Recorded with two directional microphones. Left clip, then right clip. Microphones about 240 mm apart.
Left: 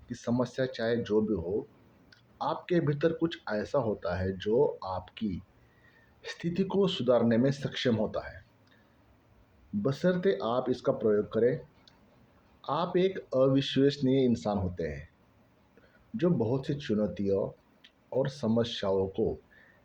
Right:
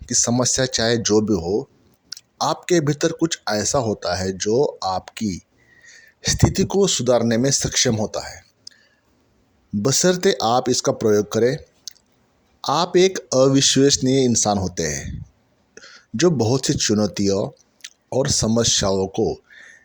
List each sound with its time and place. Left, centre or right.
0.1 s speech: right
9.8 s speech: right
12.6 s speech: right
16.1 s speech: right